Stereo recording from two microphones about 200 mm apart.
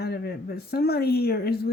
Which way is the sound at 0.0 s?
50° left (ahead or behind).